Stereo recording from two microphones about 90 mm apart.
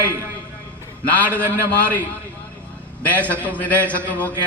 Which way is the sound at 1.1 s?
20° left (ahead or behind).